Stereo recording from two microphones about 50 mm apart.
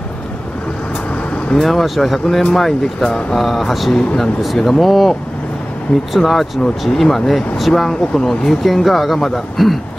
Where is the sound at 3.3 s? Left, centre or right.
Centre.